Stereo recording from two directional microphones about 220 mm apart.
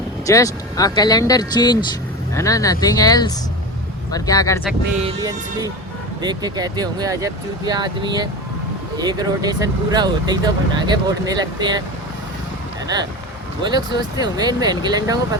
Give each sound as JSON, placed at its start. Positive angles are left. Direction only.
{"t": 0.3, "sound": "speech", "side_deg": 15}
{"t": 5.0, "sound": "speech", "side_deg": -15}
{"t": 13.6, "sound": "speech", "side_deg": -20}